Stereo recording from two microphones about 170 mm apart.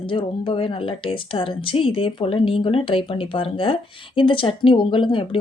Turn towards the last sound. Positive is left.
turn(degrees=30)  # may be behind; listen again after turning